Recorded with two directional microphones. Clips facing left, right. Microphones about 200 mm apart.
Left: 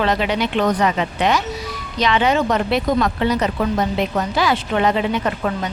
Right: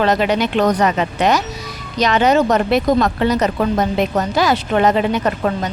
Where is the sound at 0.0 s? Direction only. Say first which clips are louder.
Right 3 dB; 45° right (ahead or behind).